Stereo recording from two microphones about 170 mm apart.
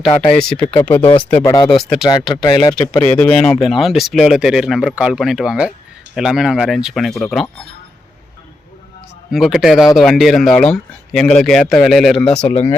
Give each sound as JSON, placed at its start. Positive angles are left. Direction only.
{"t": 0.3, "sound": "speech", "side_deg": 5}
{"t": 0.6, "sound": "speech", "side_deg": 30}
{"t": 1.7, "sound": "speech", "side_deg": 0}
{"t": 2.4, "sound": "speech", "side_deg": 25}
{"t": 3.0, "sound": "speech", "side_deg": 10}
{"t": 9.3, "sound": "speech", "side_deg": 0}